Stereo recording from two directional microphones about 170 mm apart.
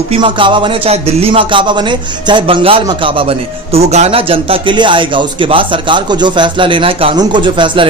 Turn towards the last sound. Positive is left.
turn(degrees=-30)  # may be behind; listen again after turning